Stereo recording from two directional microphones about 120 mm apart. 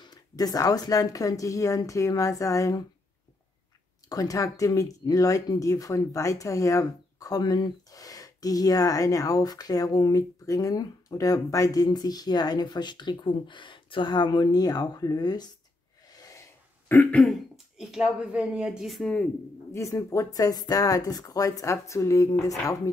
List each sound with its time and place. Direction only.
0.0 s speech: 35° left (ahead or behind)
4.1 s speech: 30° left (ahead or behind)
16.1 s a sound: 30° left (ahead or behind)
16.9 s throat clearing: 15° left (ahead or behind)
17.2 s speech: centre (ahead or behind)
19.7 s speech: 25° left (ahead or behind)